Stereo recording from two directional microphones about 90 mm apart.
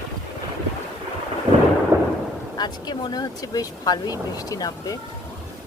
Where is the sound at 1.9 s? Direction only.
30° right (ahead or behind).